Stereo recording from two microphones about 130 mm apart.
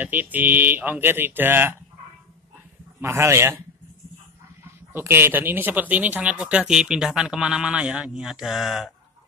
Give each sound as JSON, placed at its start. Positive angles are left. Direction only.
{"t": 0.0, "sound": "speech", "side_deg": -15}
{"t": 3.0, "sound": "a man's voice", "side_deg": -20}
{"t": 4.9, "sound": "speech", "side_deg": -15}